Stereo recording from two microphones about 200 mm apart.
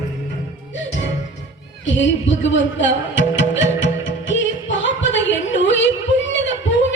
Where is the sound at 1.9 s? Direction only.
65° left (ahead or behind).